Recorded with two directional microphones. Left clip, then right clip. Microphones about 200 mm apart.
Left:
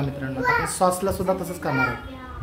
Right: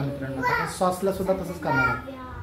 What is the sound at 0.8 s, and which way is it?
Speech, 35° left (ahead or behind).